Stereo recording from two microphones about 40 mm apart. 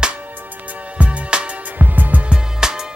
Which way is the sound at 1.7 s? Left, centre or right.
Right.